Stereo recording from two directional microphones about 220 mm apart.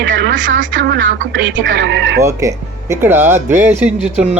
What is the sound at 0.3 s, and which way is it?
Speech, 60° right (ahead or behind).